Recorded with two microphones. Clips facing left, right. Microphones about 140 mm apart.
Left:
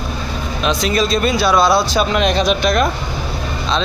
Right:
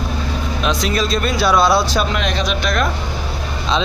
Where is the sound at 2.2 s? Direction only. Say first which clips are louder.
Left 5 dB; 20° left (ahead or behind).